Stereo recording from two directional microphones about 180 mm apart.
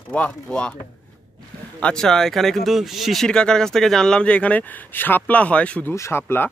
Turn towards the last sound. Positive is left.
turn(degrees=10)  # may be behind; listen again after turning